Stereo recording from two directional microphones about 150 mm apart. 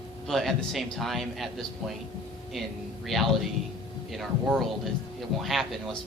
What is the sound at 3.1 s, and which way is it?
A man's voice, centre (ahead or behind).